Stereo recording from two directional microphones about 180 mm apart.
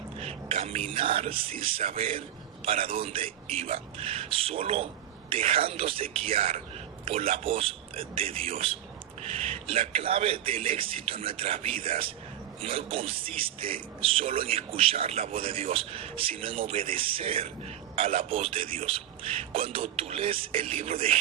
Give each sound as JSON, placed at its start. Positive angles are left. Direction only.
{"t": 0.2, "sound": "a man's voice", "side_deg": -35}